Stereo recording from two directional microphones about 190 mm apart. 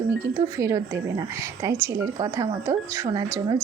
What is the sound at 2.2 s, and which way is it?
Speech, 20° right (ahead or behind).